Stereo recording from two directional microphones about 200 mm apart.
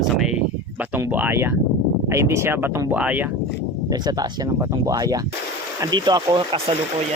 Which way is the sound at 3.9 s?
20° right (ahead or behind).